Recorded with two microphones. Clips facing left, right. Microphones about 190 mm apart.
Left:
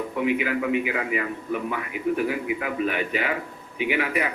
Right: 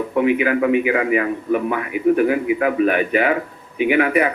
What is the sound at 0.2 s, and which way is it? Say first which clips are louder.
Speech: right 8 dB; 60° right (ahead or behind).